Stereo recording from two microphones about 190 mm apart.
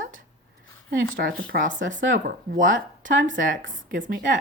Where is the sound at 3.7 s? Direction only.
45° right (ahead or behind).